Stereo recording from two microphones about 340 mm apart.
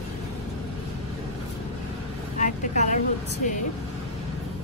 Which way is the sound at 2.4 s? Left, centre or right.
Left.